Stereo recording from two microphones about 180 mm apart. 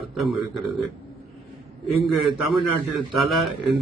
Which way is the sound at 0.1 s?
Centre (ahead or behind).